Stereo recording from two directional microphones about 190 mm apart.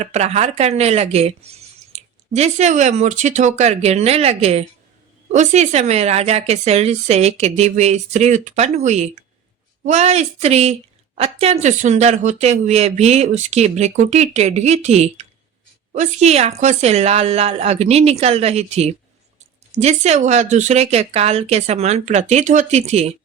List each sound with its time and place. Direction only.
0.0 s a woman's voice: 35° right (ahead or behind)